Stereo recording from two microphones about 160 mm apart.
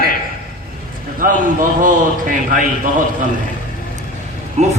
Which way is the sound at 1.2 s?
60° right (ahead or behind).